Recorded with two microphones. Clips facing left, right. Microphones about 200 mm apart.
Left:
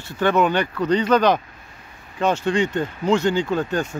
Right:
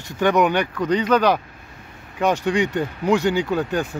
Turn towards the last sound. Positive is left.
turn(degrees=-10)  # may be behind; listen again after turning